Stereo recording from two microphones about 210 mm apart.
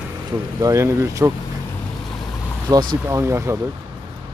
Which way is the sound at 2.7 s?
10° right (ahead or behind).